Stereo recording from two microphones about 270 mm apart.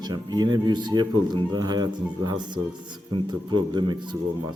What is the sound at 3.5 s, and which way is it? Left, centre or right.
Speech, centre.